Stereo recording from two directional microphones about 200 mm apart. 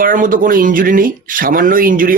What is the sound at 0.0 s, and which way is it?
Speech, 45° right (ahead or behind).